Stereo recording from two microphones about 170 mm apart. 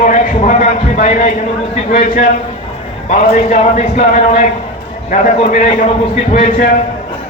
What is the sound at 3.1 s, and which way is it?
Speech, 45° left (ahead or behind).